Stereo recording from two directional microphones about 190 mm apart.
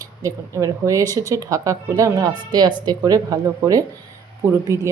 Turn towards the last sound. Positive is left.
turn(degrees=-15)  # may be behind; listen again after turning